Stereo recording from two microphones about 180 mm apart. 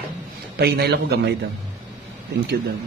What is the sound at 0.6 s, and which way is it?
Speech, 60° right (ahead or behind).